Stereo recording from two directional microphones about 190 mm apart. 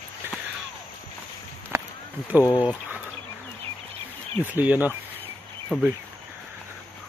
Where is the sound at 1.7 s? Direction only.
15° right (ahead or behind).